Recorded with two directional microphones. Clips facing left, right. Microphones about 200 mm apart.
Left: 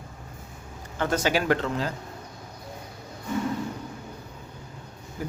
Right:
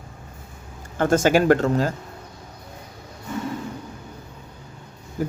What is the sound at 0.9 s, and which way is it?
Speech, 50° right (ahead or behind).